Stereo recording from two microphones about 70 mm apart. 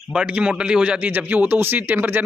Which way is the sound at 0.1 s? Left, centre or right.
Centre.